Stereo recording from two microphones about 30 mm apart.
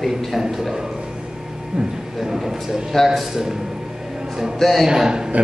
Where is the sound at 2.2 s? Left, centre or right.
Centre.